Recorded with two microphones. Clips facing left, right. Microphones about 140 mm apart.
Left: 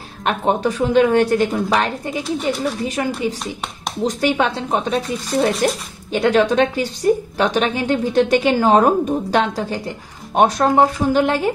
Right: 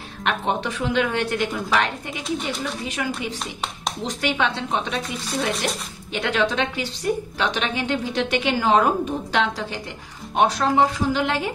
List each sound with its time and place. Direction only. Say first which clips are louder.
0.2 s a woman's voice: left 6 dB; 40° left (ahead or behind)